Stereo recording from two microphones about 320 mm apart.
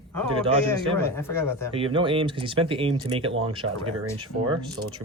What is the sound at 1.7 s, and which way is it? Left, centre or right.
Speech, centre.